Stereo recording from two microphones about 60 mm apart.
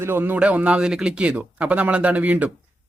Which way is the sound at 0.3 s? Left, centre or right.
Right.